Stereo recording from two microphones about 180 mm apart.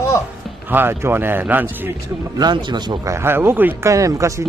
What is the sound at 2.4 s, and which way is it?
Speech, 25° right (ahead or behind).